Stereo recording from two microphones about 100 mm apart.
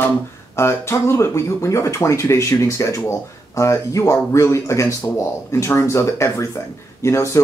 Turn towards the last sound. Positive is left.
turn(degrees=30)  # may be behind; listen again after turning